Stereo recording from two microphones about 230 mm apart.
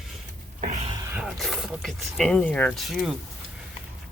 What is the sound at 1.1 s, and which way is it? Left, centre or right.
Speech, centre.